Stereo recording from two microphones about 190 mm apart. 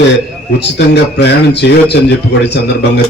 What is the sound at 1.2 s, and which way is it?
Speech, 60° left (ahead or behind).